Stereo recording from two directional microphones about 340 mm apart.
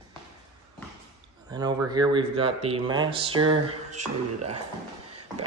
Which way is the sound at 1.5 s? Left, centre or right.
Centre.